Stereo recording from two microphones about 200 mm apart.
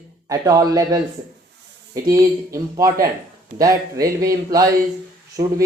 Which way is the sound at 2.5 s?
15° right (ahead or behind).